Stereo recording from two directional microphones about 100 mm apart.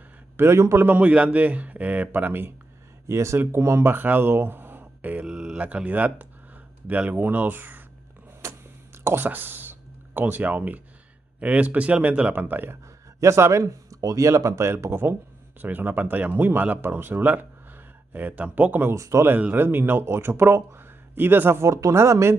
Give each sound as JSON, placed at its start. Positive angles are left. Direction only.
{"t": 0.4, "sound": "a man's voice", "side_deg": -30}
{"t": 5.3, "sound": "speech", "side_deg": -5}
{"t": 8.4, "sound": "a sound", "side_deg": -35}
{"t": 9.0, "sound": "a man's voice", "side_deg": -20}
{"t": 13.2, "sound": "speech", "side_deg": -30}
{"t": 19.3, "sound": "speech", "side_deg": -20}